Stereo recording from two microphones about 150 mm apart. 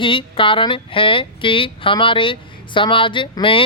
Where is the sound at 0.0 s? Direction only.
35° left (ahead or behind).